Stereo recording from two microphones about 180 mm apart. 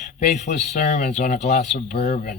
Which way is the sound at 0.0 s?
40° left (ahead or behind).